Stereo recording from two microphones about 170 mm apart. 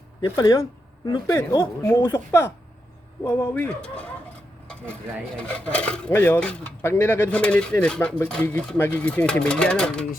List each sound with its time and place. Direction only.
0.3 s speech: 20° left (ahead or behind)
5.4 s speech: 10° left (ahead or behind)